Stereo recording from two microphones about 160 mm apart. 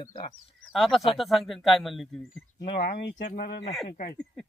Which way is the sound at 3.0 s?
80° left.